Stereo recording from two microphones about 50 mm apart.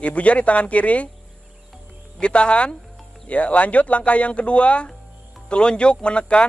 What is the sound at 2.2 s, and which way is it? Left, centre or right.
Speech, left.